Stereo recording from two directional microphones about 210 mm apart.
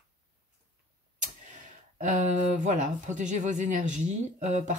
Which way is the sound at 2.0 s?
35° right (ahead or behind).